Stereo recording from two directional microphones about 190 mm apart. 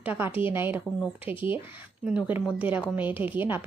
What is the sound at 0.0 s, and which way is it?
Speech, 10° right (ahead or behind).